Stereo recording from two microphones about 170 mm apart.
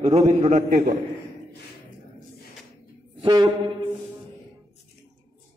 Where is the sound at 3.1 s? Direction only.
25° right (ahead or behind).